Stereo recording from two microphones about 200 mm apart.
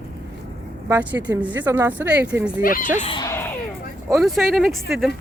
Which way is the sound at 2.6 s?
45° left (ahead or behind).